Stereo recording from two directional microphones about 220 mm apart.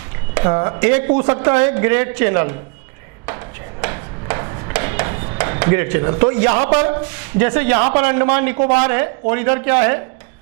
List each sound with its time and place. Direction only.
0.3 s speech: 25° right (ahead or behind)
3.8 s a sound: 15° right (ahead or behind)
5.4 s speech: 15° right (ahead or behind)